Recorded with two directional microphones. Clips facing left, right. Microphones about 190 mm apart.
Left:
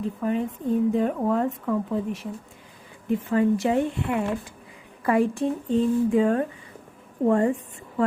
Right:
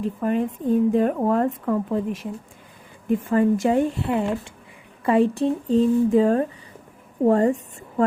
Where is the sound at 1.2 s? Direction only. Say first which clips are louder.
Right 3 dB; 45° right (ahead or behind).